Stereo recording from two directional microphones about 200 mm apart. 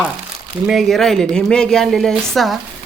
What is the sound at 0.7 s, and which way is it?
A woman's voice, centre (ahead or behind).